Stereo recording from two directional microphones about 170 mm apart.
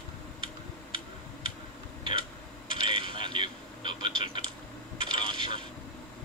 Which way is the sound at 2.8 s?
30° right (ahead or behind).